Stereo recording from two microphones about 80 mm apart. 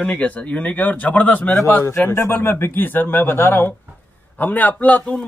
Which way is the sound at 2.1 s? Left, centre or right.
Left.